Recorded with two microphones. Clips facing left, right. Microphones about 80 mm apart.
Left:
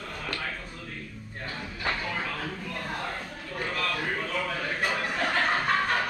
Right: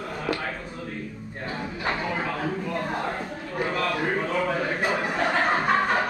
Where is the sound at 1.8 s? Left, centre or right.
Centre.